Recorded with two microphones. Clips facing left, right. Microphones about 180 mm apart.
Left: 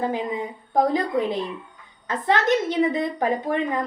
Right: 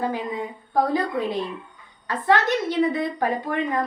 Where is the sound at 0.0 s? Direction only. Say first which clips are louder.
Left 1 dB; 20° left (ahead or behind).